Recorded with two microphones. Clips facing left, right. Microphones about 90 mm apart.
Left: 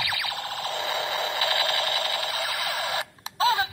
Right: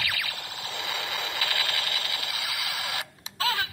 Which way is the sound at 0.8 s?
30° left (ahead or behind).